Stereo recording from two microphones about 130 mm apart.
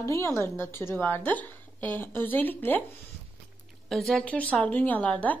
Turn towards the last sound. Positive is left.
turn(degrees=10)  # may be behind; listen again after turning